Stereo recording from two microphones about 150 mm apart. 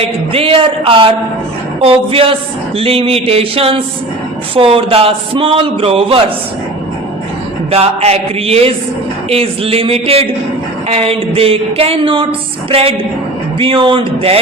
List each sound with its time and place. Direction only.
0.0 s a man's voice: 40° right (ahead or behind)
7.7 s a sound: 45° right (ahead or behind)
9.3 s a man's voice: 40° right (ahead or behind)
13.6 s a man's voice: 35° right (ahead or behind)